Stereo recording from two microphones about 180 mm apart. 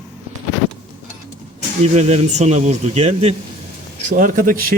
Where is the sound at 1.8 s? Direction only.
35° right (ahead or behind).